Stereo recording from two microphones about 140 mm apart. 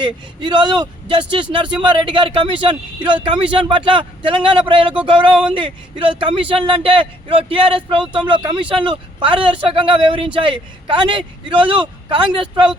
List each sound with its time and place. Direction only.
0.0 s speech: 35° right (ahead or behind)